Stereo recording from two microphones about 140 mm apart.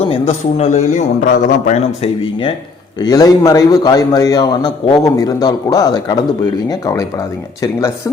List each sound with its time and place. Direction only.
0.0 s a man's voice: 50° left (ahead or behind)
3.0 s a man's voice: 25° left (ahead or behind)